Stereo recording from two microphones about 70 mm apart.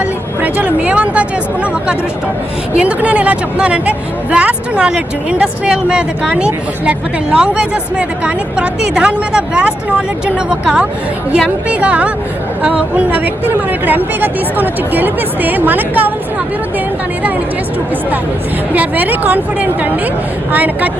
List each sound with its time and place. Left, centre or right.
0.0 s speech: right
18.7 s speech: right